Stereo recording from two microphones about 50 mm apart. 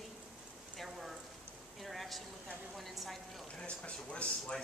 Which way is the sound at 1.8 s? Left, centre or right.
Centre.